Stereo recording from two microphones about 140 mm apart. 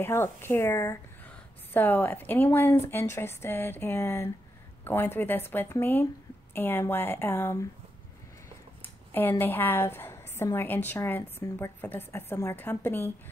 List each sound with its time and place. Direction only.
0.0 s a woman's voice: 15° left (ahead or behind)
9.1 s a woman's voice: 15° left (ahead or behind)